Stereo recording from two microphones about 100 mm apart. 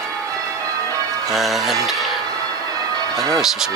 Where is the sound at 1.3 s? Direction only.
Centre (ahead or behind).